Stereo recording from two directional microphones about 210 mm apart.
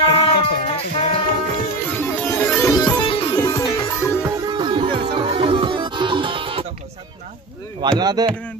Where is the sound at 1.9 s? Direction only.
10° left (ahead or behind); by 3.3 s 25° left (ahead or behind).